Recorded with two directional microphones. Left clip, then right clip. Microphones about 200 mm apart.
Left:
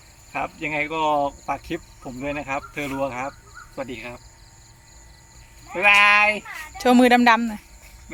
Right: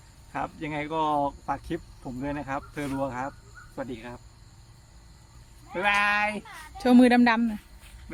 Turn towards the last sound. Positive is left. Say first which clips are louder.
# left 6 dB
turn(degrees=-5)  # may be behind; listen again after turning